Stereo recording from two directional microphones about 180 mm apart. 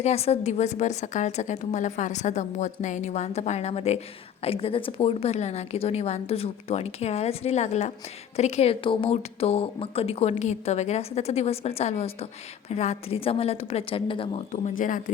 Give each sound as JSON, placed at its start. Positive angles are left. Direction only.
{"t": 0.0, "sound": "speech", "side_deg": 35}